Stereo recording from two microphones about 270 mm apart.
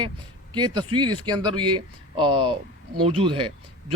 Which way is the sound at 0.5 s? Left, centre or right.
Centre.